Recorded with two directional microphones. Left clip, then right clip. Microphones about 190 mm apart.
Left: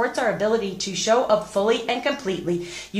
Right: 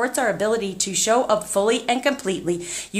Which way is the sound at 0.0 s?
50° right (ahead or behind).